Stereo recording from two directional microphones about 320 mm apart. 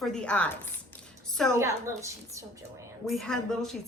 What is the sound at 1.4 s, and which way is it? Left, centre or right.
A woman's voice, centre.